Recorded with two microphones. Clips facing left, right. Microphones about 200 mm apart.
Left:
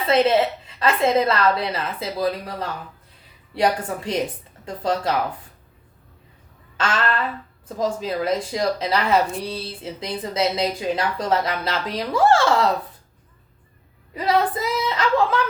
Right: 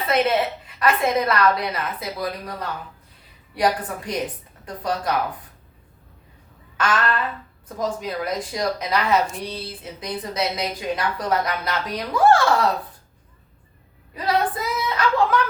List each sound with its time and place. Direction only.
0.1 s a woman's voice: 25° left (ahead or behind)
6.7 s a woman's voice: 25° left (ahead or behind)
14.1 s a woman's voice: 25° left (ahead or behind)